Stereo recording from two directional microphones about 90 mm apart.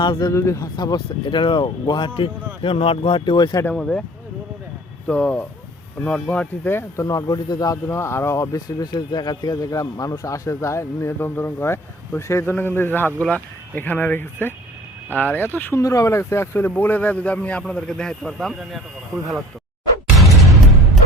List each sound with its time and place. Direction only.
0.0 s speech: 60° left (ahead or behind)
0.3 s speech: 35° left (ahead or behind)
0.6 s speech: 50° left (ahead or behind)
3.7 s speech: 10° left (ahead or behind)
5.0 s speech: 15° left (ahead or behind)
6.7 s speech: 30° left (ahead or behind); by 7.8 s 45° left (ahead or behind)
7.9 s speech: 30° left (ahead or behind)
8.5 s speech: 45° left (ahead or behind); by 15.8 s 25° left (ahead or behind)
15.8 s speech: 35° left (ahead or behind); by 19.4 s 5° left (ahead or behind)